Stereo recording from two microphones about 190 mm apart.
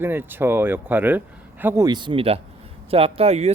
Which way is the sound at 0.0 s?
10° right (ahead or behind).